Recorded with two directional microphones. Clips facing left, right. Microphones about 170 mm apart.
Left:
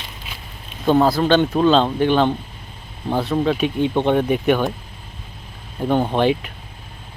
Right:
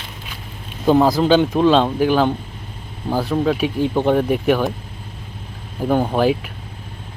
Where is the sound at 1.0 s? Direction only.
15° right (ahead or behind).